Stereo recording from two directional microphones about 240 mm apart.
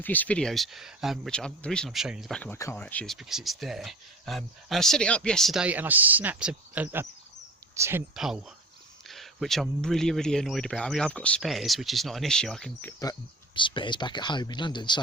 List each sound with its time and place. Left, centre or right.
0.0 s speech: centre
13.6 s speech: centre